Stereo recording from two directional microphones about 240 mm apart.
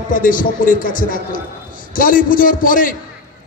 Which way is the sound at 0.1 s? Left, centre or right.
Left.